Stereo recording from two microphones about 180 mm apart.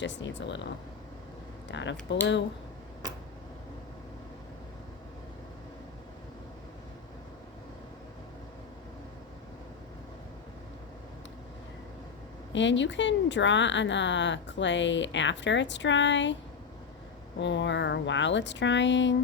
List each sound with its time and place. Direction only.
0.0 s speech: 85° left
12.5 s a woman's voice: 90° left
17.4 s speech: 85° left